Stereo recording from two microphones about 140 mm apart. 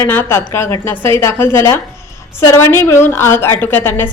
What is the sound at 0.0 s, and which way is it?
A woman's voice, 15° left (ahead or behind).